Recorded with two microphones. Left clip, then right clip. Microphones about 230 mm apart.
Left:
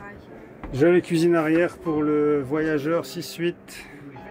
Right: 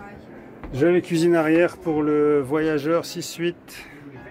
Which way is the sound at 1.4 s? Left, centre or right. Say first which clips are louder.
Right 3 dB; right.